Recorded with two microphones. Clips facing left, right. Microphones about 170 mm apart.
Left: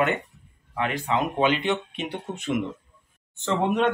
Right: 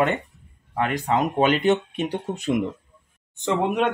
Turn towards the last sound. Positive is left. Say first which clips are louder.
# right 1 dB
turn(degrees=-15)  # may be behind; listen again after turning